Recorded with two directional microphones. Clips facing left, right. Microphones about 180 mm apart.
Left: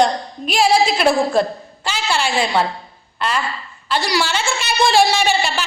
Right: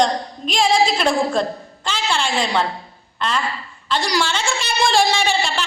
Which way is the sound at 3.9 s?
5° left (ahead or behind).